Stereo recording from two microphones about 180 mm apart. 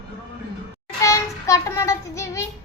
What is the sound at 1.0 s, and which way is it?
Child singing, 15° left (ahead or behind).